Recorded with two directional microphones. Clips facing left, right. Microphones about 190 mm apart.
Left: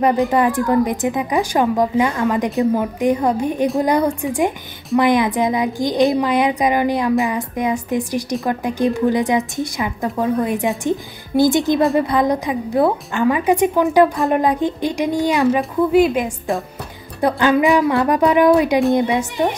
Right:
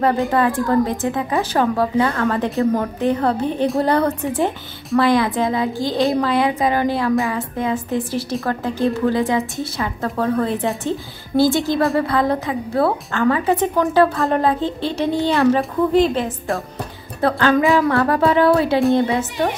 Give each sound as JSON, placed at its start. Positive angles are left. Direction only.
{"t": 0.0, "sound": "a woman's voice", "side_deg": 15}
{"t": 17.2, "sound": "a woman's voice", "side_deg": 15}